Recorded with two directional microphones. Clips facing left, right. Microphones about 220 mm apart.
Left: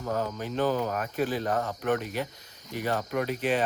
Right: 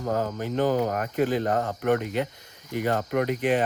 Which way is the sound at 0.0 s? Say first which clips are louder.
Right 3 dB; 45° right (ahead or behind).